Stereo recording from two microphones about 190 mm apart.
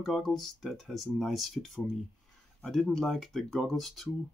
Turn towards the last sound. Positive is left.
turn(degrees=0)  # may be behind; listen again after turning